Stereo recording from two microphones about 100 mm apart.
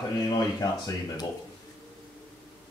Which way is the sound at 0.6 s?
40° left (ahead or behind).